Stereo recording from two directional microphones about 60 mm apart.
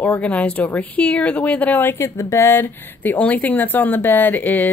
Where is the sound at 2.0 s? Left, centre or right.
Left.